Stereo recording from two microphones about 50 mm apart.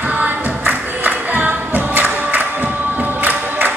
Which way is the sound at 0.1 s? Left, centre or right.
Right.